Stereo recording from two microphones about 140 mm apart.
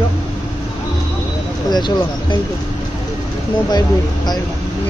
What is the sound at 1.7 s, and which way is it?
Speech, 30° left (ahead or behind).